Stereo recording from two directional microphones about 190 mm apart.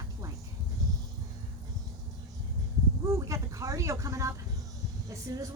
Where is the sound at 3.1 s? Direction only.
15° right (ahead or behind).